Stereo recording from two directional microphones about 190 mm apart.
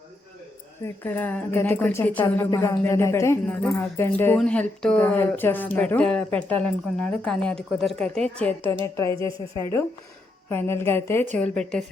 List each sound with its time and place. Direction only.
1.0 s speech: 10° left (ahead or behind)
9.1 s a woman's voice: 25° right (ahead or behind)
10.5 s a woman's voice: 10° left (ahead or behind)